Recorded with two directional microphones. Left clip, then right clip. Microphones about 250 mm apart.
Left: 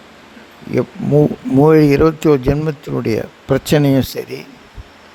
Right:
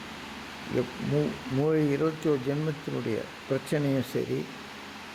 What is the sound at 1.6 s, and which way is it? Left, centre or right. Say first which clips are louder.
Speech: left 16 dB; left.